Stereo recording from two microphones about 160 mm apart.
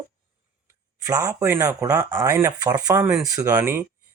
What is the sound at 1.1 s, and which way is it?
Speech, 20° right (ahead or behind).